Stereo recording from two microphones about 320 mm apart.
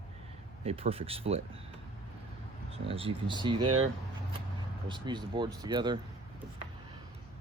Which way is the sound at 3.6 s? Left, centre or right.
Right.